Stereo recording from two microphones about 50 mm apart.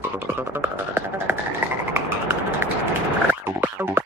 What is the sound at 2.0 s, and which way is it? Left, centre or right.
Vehicle, right.